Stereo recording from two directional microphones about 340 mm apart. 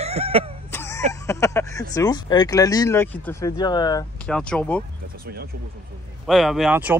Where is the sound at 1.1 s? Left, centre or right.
Centre.